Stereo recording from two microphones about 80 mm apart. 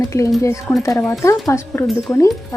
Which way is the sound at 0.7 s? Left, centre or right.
Left.